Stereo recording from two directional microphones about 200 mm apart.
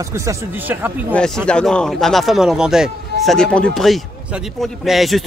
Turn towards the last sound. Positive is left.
turn(degrees=0)  # may be behind; listen again after turning